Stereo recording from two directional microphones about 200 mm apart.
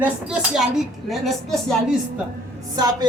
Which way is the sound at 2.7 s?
20° right (ahead or behind).